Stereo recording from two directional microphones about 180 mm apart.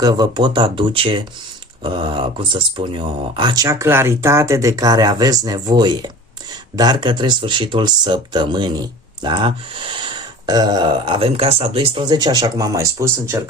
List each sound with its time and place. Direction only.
0.0 s speech: 25° right (ahead or behind)